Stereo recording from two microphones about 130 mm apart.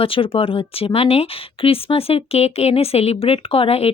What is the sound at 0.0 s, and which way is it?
Speech, 45° left (ahead or behind).